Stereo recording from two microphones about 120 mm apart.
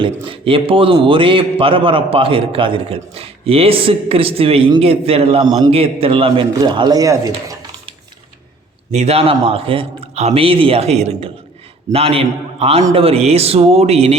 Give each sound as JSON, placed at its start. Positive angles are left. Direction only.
{"t": 0.0, "sound": "a man's voice", "side_deg": -45}
{"t": 6.6, "sound": "speech", "side_deg": -35}
{"t": 8.9, "sound": "a man's voice", "side_deg": -65}
{"t": 10.2, "sound": "speech", "side_deg": -60}